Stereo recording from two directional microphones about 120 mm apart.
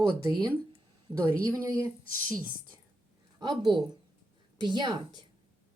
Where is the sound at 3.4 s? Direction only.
40° right (ahead or behind).